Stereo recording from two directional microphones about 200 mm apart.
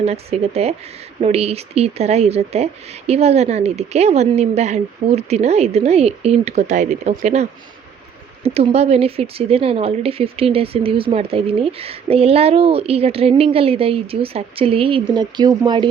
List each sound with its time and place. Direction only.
0.0 s speech: 30° right (ahead or behind)
8.4 s a woman's voice: 30° right (ahead or behind)